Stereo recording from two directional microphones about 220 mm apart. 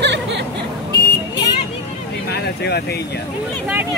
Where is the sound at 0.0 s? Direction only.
50° right (ahead or behind).